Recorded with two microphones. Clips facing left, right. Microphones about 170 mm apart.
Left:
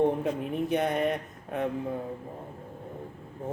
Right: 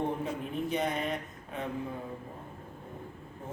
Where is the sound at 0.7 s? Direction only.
60° left (ahead or behind).